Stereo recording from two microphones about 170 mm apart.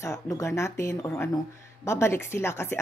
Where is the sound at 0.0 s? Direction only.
15° left (ahead or behind).